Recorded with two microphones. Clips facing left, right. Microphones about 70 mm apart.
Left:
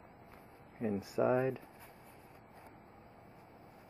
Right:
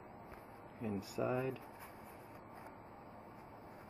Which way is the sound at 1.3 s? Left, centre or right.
Left.